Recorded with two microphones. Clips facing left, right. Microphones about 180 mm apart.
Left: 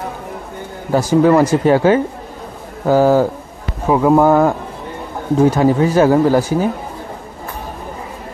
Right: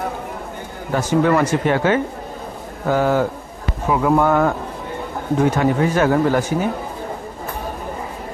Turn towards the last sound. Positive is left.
turn(degrees=35)  # may be behind; listen again after turning